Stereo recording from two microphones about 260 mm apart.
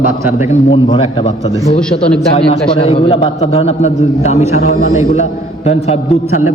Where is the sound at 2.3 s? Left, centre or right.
Left.